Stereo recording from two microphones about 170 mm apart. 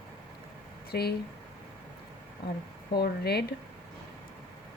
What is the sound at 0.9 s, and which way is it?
Speech, 70° left (ahead or behind).